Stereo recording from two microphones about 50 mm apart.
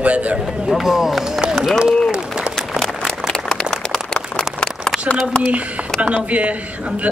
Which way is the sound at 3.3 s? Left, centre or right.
Centre.